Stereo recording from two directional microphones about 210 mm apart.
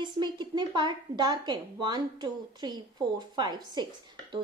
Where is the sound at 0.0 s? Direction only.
20° right (ahead or behind).